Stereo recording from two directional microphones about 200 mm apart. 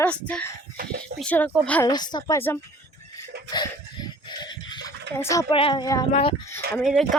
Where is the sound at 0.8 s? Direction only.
50° right (ahead or behind).